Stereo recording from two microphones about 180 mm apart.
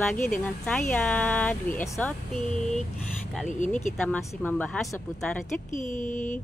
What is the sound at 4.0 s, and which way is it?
Speech, 10° left (ahead or behind).